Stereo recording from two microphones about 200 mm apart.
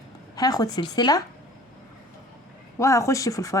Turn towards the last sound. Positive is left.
turn(degrees=15)  # may be behind; listen again after turning